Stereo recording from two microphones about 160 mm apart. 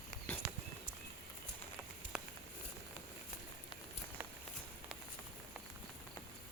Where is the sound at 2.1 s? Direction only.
5° right (ahead or behind).